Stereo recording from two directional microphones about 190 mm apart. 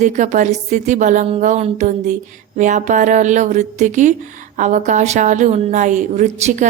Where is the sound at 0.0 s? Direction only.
40° right (ahead or behind).